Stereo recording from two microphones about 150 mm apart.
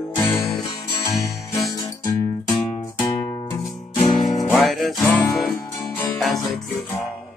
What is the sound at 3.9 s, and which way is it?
Music, centre (ahead or behind).